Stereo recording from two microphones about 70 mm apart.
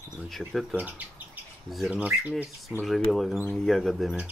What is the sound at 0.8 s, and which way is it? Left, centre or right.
Bird, right.